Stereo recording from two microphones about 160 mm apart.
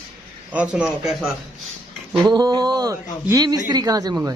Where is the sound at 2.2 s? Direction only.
25° right (ahead or behind).